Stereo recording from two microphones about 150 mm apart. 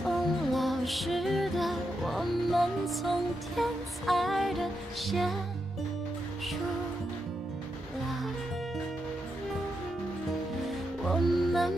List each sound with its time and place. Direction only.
0.0 s music: centre (ahead or behind)
11.1 s music: centre (ahead or behind)